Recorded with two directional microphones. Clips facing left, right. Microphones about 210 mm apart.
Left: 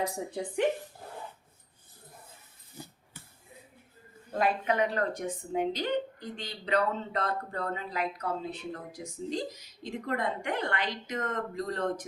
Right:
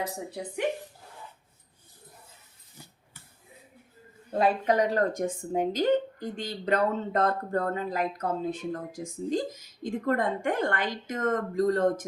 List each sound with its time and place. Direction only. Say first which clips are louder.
4.4 s speech: right 4 dB; 35° right (ahead or behind)